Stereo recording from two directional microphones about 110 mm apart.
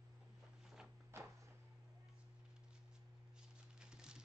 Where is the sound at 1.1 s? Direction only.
25° right (ahead or behind).